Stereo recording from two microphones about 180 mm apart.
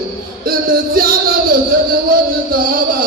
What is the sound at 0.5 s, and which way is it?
Music, 55° right (ahead or behind).